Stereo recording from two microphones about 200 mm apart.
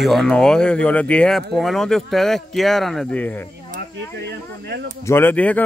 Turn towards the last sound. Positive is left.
turn(degrees=5)  # may be behind; listen again after turning